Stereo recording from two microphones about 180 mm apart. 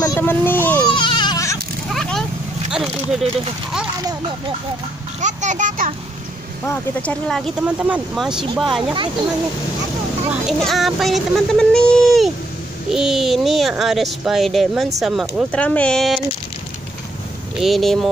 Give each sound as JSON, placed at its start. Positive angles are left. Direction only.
{"t": 0.0, "sound": "a sound", "side_deg": 15}
{"t": 0.8, "sound": "baby cry", "side_deg": 25}
{"t": 1.9, "sound": "cat", "side_deg": 0}
{"t": 2.7, "sound": "speech", "side_deg": 0}
{"t": 5.2, "sound": "a child's voice", "side_deg": -40}
{"t": 6.6, "sound": "speech", "side_deg": 10}
{"t": 7.6, "sound": "speech", "side_deg": -10}
{"t": 10.3, "sound": "speech", "side_deg": 0}
{"t": 17.6, "sound": "speech", "side_deg": 0}